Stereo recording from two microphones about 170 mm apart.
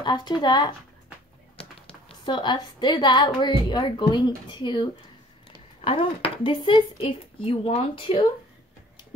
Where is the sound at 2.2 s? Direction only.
25° left (ahead or behind).